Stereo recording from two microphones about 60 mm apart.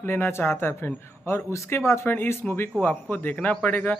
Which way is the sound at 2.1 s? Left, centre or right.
Left.